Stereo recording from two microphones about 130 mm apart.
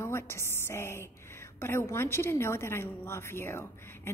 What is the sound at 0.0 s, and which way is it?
A woman's voice, 20° left (ahead or behind).